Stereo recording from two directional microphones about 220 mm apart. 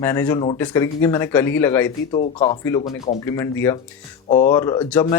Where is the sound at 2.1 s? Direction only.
25° left (ahead or behind).